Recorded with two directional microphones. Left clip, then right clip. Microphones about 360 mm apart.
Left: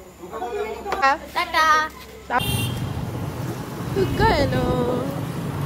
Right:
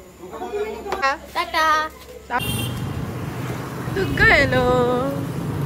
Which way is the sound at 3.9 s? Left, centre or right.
Centre.